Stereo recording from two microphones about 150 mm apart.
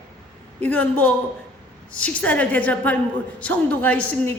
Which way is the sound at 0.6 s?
10° left (ahead or behind).